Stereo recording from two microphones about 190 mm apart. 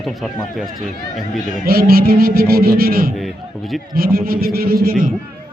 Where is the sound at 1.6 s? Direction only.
50° right (ahead or behind).